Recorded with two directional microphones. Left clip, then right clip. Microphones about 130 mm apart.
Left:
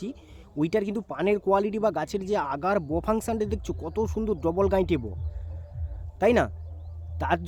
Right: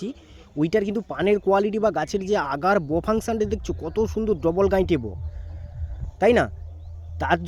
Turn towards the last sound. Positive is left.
turn(degrees=-30)  # may be behind; listen again after turning